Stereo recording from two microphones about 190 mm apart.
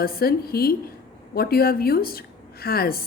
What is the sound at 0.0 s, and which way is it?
A woman's voice, 50° left (ahead or behind).